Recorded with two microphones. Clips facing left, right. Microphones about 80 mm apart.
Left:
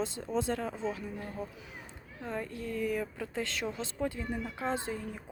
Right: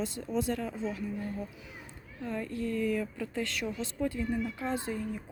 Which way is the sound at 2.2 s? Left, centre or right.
Left.